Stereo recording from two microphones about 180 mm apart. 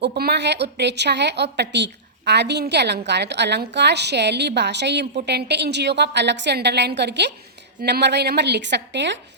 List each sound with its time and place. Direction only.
0.0 s a woman's voice: 60° right (ahead or behind); by 9.1 s 75° right (ahead or behind)